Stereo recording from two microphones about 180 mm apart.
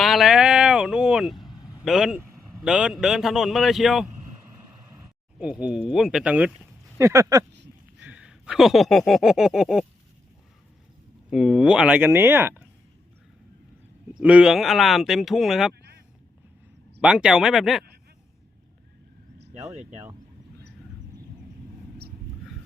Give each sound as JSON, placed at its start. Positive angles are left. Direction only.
{"t": 0.0, "sound": "a sound", "side_deg": 0}
{"t": 1.8, "sound": "a man's voice", "side_deg": 0}
{"t": 5.4, "sound": "a man's voice", "side_deg": -5}
{"t": 7.0, "sound": "speech", "side_deg": -15}
{"t": 7.9, "sound": "a sound", "side_deg": -10}
{"t": 11.3, "sound": "speech", "side_deg": 0}
{"t": 14.1, "sound": "a man's voice", "side_deg": -5}
{"t": 17.0, "sound": "a man's voice", "side_deg": -5}